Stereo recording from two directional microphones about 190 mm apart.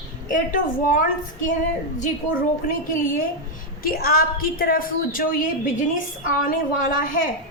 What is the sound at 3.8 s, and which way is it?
A woman's voice, 50° left (ahead or behind).